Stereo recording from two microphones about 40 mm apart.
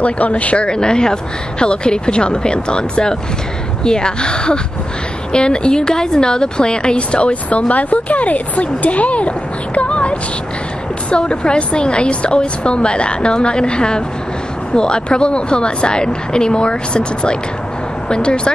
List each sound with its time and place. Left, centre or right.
0.0 s speech: left
0.7 s speech: left
9.8 s a sound: left
11.1 s speech: left